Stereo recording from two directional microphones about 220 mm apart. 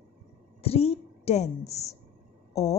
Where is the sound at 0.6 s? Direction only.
25° left (ahead or behind).